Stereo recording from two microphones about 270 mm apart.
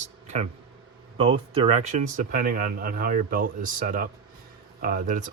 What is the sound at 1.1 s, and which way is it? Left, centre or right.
Speech, centre.